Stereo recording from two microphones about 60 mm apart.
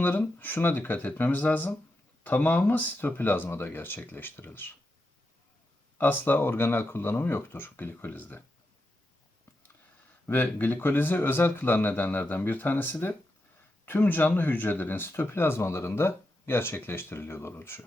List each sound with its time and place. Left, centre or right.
0.0 s speech: left
6.0 s speech: left
10.2 s speech: left